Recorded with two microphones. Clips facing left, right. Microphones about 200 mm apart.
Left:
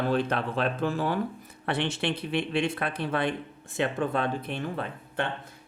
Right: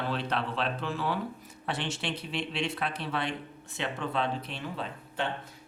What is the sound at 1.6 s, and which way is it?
Speech, 60° left (ahead or behind).